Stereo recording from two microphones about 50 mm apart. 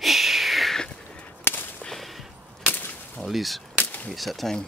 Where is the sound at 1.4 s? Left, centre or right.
Left.